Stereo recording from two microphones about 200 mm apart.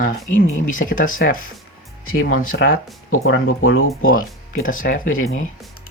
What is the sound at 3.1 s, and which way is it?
Speech, 90° left.